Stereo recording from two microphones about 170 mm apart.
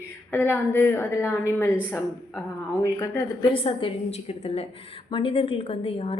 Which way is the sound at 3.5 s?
35° left (ahead or behind).